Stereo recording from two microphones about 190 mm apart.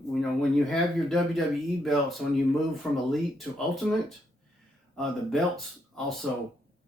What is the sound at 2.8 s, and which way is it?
Speech, 5° left (ahead or behind).